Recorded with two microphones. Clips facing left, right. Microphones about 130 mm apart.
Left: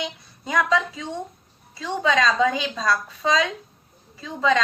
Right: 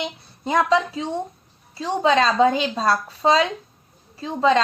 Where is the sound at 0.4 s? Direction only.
30° right (ahead or behind).